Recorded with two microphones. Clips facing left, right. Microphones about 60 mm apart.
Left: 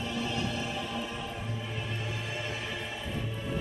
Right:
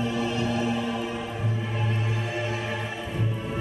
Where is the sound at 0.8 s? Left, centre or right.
Right.